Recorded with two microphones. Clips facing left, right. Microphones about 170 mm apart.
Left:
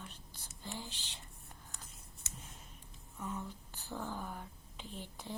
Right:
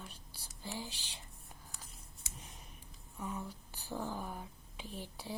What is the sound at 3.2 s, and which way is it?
Speech, 15° right (ahead or behind).